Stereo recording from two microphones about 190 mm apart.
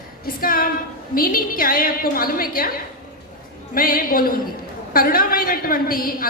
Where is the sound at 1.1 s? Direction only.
50° left (ahead or behind).